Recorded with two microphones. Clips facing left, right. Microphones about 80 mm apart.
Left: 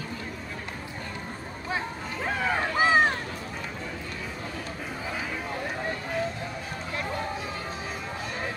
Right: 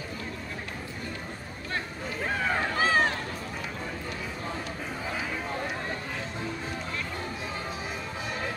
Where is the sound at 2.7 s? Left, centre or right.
Centre.